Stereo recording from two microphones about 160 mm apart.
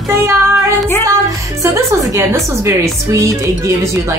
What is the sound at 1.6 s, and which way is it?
A woman's voice, 20° right (ahead or behind).